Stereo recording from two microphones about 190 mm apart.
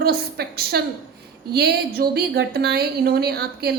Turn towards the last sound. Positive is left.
turn(degrees=-55)  # may be behind; listen again after turning